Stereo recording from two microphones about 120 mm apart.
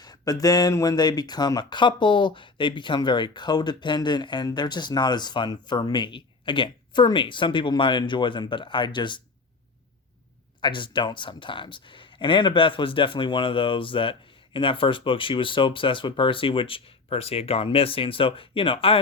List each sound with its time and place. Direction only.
0.0 s speech: 30° left (ahead or behind)
10.6 s speech: 40° left (ahead or behind)